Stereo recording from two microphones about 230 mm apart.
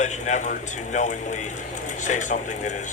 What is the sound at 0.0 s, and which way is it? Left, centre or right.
Speech, left.